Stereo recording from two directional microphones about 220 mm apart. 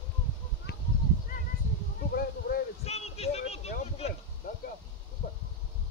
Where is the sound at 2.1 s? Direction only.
45° left (ahead or behind).